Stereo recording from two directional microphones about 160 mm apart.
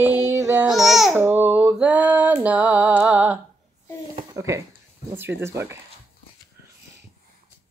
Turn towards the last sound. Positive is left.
turn(degrees=-15)  # may be behind; listen again after turning